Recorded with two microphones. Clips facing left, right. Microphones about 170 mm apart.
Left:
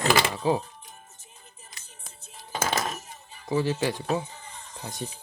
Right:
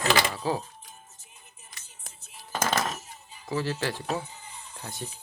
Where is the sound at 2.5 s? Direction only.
15° left (ahead or behind).